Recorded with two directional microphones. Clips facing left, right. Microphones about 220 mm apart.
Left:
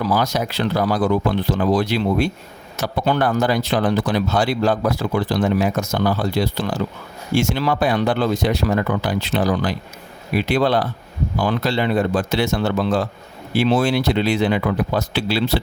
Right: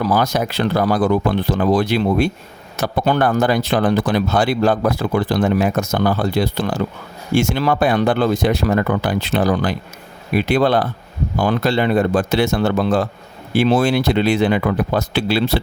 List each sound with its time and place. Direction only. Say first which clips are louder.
0.0 s speech: right 2 dB; 50° right (ahead or behind)